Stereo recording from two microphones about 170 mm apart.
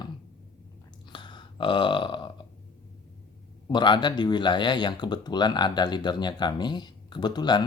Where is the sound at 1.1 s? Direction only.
25° left (ahead or behind).